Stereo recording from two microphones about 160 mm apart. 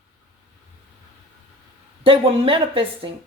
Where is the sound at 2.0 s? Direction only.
35° right (ahead or behind).